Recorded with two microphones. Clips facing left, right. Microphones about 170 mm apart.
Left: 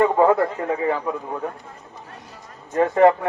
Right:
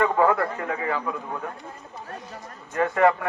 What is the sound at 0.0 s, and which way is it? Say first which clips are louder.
A man's voice: left 4 dB; 25° left (ahead or behind).